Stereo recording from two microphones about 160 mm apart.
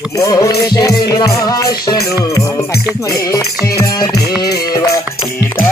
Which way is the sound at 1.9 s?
80° left.